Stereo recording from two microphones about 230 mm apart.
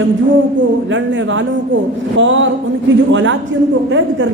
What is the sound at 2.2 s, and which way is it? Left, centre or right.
A woman's voice, right.